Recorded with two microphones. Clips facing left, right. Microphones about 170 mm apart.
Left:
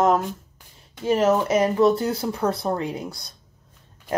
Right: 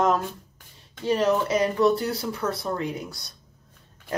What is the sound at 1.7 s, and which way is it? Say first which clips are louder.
Speech: left 3 dB; 30° left (ahead or behind).